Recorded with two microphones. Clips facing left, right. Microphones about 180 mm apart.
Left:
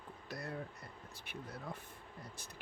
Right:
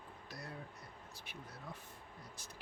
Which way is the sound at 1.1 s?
55° left (ahead or behind).